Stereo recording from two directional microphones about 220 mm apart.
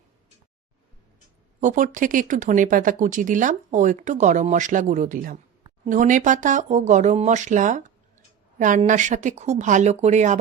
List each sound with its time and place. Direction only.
1.6 s speech: 35° right (ahead or behind)